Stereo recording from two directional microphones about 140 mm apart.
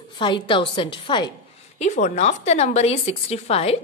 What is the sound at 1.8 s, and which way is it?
A woman's voice, 55° left (ahead or behind).